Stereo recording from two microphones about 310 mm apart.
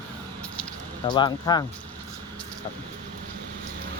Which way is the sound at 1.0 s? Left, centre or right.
Centre.